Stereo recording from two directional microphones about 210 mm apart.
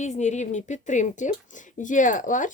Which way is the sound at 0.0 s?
35° left (ahead or behind).